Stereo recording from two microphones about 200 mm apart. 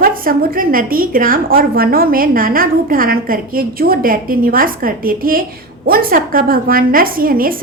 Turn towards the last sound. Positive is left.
turn(degrees=-45)  # may be behind; listen again after turning